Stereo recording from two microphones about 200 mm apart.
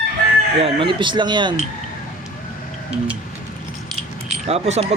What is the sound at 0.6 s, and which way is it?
Speech, 25° right (ahead or behind).